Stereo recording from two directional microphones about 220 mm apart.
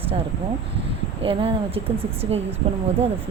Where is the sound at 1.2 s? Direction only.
25° right (ahead or behind).